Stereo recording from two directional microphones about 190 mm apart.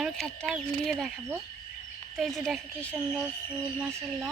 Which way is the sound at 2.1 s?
Centre (ahead or behind).